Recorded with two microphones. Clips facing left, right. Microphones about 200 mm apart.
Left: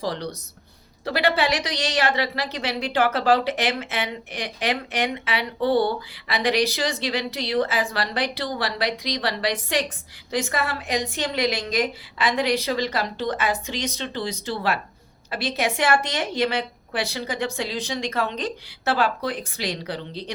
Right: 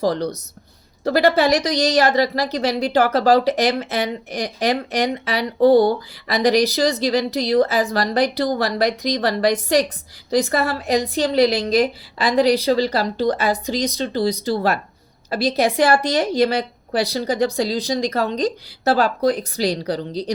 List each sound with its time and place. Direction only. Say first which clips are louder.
0.0 s a woman's voice: right 8 dB; 45° right (ahead or behind)